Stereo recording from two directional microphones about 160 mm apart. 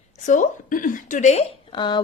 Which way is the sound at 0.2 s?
50° left (ahead or behind).